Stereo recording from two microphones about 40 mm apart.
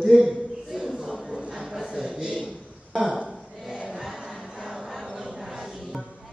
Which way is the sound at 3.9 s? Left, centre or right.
Centre.